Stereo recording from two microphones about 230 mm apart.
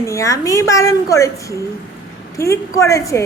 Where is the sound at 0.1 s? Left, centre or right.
Centre.